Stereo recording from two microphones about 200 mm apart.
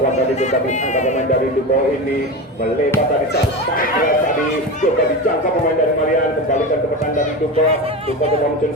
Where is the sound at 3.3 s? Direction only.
45° left (ahead or behind).